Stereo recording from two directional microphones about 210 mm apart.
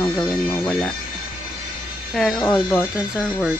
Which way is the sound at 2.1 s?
5° left (ahead or behind).